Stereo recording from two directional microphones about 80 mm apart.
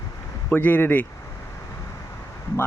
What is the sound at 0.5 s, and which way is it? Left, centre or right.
Speech, left.